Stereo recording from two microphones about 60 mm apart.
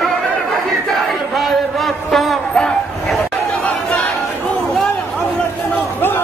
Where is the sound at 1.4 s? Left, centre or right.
Centre.